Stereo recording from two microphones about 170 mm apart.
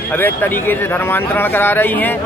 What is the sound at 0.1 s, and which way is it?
Speech, 10° left (ahead or behind).